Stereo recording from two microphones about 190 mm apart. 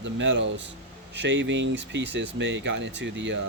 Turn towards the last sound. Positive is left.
turn(degrees=-70)  # may be behind; listen again after turning